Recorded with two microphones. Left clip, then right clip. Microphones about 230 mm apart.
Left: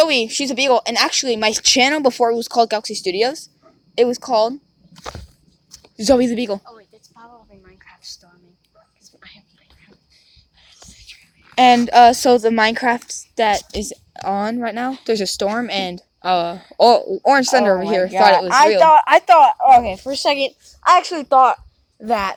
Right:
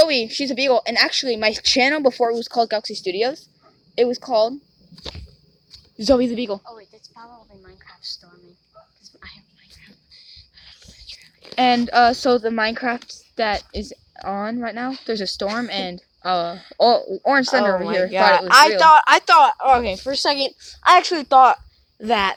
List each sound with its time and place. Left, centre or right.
0.0 s speech: left
6.0 s speech: left
6.7 s a sound: centre
9.0 s whispering: centre
9.8 s whispering: centre
11.1 s a woman's voice: left
18.9 s speech: right